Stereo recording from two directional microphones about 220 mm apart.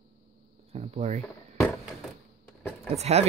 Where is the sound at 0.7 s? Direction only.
30° right (ahead or behind).